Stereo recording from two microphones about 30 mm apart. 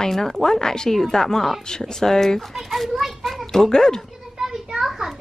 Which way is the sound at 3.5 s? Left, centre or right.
Centre.